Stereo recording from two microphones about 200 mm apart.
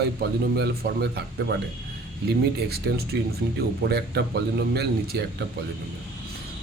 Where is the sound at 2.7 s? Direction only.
50° right (ahead or behind).